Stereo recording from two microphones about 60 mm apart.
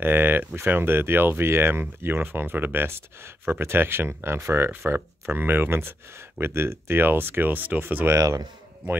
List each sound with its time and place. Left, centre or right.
0.0 s speech: right
8.1 s speech: right